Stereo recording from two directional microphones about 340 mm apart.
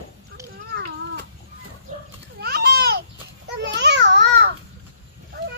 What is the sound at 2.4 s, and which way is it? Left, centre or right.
Babbling, right.